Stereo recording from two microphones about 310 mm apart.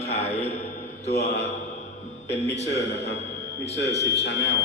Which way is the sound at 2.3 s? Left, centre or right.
Left.